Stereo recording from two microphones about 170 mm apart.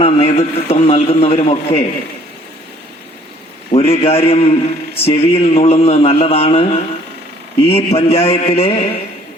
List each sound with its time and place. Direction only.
0.0 s a man's voice: 35° left (ahead or behind)
3.7 s a man's voice: 35° left (ahead or behind)